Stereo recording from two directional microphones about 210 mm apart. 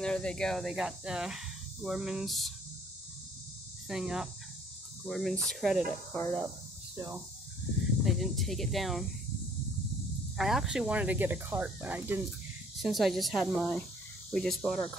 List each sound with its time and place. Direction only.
0.0 s speech: 5° left (ahead or behind)
3.9 s speech: 5° right (ahead or behind)
6.1 s speech: 15° left (ahead or behind)
8.0 s speech: centre (ahead or behind)
10.3 s speech: centre (ahead or behind)